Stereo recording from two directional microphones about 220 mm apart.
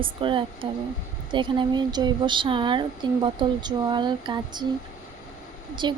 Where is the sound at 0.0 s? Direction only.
25° right (ahead or behind).